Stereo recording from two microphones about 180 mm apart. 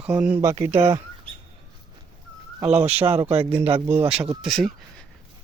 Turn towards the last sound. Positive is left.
turn(degrees=0)  # may be behind; listen again after turning